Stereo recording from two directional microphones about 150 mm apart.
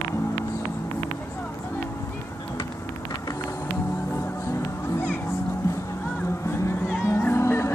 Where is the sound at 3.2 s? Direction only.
20° left (ahead or behind).